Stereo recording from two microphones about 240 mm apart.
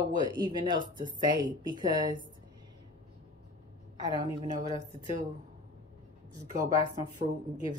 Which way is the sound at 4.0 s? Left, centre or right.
Centre.